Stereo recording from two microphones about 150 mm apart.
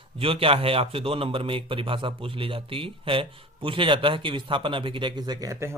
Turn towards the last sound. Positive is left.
turn(degrees=-20)  # may be behind; listen again after turning